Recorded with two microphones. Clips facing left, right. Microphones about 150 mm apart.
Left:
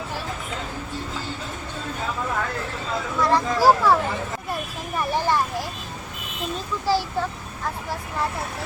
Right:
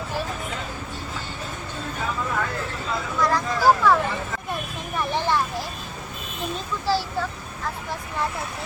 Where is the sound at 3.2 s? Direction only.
30° left (ahead or behind).